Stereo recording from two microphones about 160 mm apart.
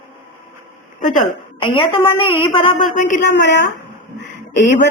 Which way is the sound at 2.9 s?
55° left (ahead or behind).